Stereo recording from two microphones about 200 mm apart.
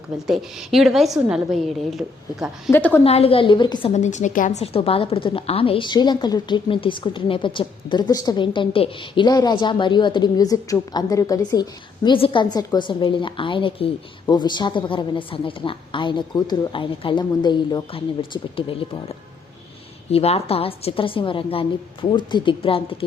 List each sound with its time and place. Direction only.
0.3 s a woman's voice: centre (ahead or behind)
2.7 s a woman's voice: 10° left (ahead or behind)
3.0 s a woman's voice: 30° left (ahead or behind)
3.9 s a woman's voice: 35° left (ahead or behind)